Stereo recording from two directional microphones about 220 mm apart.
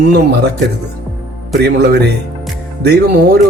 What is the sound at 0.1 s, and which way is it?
Speech, 50° right (ahead or behind).